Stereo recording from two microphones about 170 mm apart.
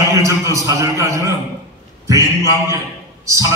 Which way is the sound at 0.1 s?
20° right (ahead or behind).